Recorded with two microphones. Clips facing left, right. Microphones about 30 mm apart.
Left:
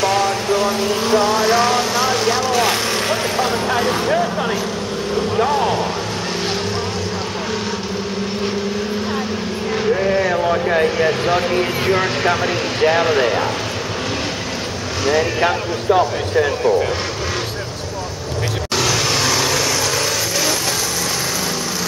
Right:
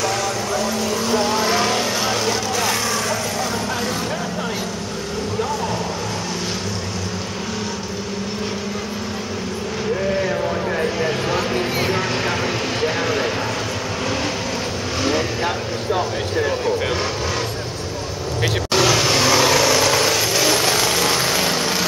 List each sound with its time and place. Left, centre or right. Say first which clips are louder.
0.0 s vehicle: left 5 dB; left
1.2 s vehicle: left 4 dB; centre
9.9 s a sound: left 1 dB; centre
11.9 s speech: left 4 dB; centre
15.4 s speech: left 5 dB; left
18.8 s vehicle: right 2 dB; centre